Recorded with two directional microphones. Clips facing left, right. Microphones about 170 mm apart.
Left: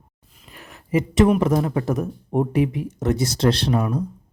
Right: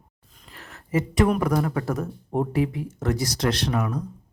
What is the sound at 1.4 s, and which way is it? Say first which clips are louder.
Speech: left 3 dB; 20° left (ahead or behind).